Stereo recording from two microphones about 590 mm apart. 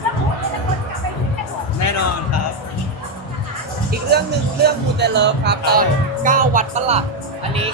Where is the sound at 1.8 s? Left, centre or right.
Left.